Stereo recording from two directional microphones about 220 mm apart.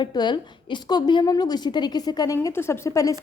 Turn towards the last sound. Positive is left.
turn(degrees=15)  # may be behind; listen again after turning